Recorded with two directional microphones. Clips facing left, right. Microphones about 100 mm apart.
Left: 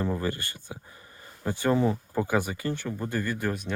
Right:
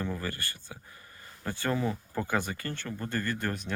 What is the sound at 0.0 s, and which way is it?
Speech, 25° left (ahead or behind).